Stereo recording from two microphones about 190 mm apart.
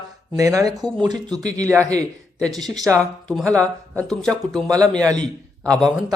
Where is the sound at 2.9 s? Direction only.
5° left (ahead or behind).